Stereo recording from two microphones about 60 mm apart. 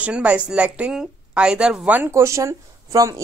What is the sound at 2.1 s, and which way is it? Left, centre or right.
Speech, right.